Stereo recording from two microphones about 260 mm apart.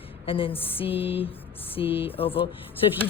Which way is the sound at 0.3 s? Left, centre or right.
Left.